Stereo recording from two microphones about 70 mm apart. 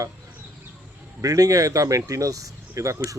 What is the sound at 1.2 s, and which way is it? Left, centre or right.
Speech, right.